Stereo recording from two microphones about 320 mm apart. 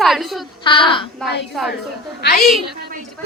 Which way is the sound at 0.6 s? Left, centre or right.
Centre.